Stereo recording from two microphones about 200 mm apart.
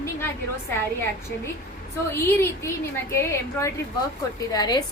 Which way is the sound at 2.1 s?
10° left (ahead or behind).